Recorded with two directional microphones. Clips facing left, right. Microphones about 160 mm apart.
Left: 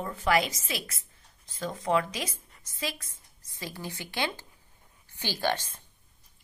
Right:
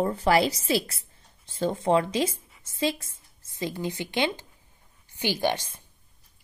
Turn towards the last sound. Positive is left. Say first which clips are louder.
# right 3 dB
turn(degrees=-10)  # may be behind; listen again after turning